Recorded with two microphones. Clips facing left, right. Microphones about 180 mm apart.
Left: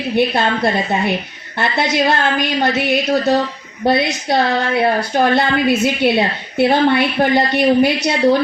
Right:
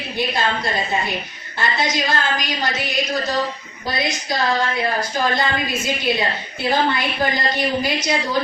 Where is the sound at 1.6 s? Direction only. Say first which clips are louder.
Left 5 dB; 65° left (ahead or behind).